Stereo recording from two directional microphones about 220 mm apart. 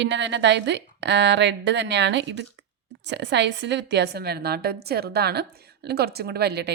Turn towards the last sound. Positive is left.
turn(degrees=-50)  # may be behind; listen again after turning